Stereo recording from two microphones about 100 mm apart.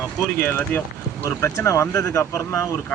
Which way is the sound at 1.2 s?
30° left (ahead or behind).